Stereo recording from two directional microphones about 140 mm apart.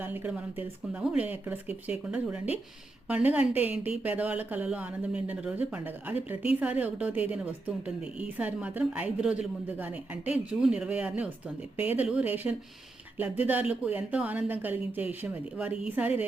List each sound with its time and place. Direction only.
0.0 s a woman's voice: 15° right (ahead or behind)